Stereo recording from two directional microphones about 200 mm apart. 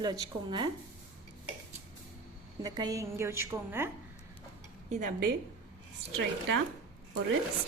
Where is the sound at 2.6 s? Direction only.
20° right (ahead or behind).